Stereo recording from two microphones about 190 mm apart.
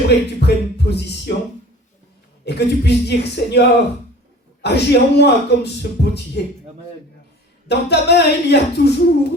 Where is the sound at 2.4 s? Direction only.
60° left (ahead or behind).